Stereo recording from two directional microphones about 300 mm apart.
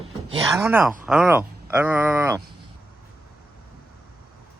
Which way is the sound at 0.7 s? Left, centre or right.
Centre.